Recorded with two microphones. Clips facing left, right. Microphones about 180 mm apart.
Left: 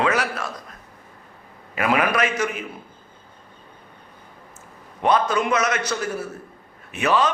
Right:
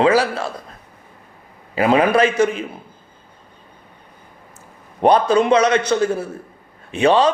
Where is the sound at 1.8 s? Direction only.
30° right (ahead or behind).